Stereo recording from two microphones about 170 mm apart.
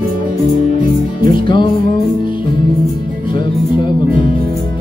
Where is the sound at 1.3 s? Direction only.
30° left (ahead or behind).